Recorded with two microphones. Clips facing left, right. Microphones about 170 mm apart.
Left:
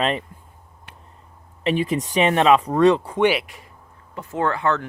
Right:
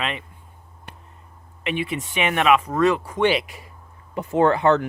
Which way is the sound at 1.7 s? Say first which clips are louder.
Left 5 dB; 35° left (ahead or behind).